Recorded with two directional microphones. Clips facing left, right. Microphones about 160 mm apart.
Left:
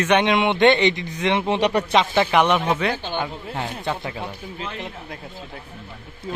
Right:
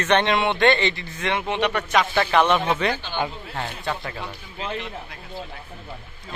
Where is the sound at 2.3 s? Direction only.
15° left (ahead or behind).